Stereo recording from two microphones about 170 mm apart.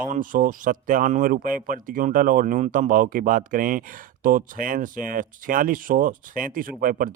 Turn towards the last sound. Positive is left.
turn(degrees=-55)  # may be behind; listen again after turning